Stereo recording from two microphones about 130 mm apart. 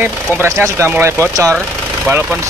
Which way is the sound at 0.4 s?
20° right (ahead or behind).